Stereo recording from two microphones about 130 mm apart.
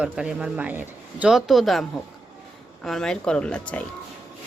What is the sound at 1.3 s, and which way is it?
Speech, centre (ahead or behind).